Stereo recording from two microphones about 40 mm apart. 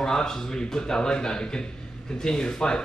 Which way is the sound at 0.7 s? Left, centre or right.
Centre.